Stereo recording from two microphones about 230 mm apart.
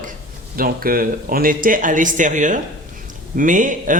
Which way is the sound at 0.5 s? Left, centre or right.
Right.